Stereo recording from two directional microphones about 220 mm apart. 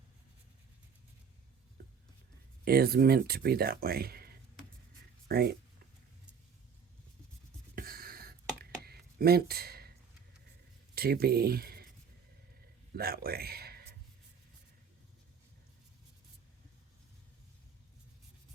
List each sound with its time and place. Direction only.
2.6 s speech: 45° right (ahead or behind)
7.8 s a sound: 40° right (ahead or behind)
10.9 s speech: 45° right (ahead or behind)
12.9 s speech: 45° right (ahead or behind)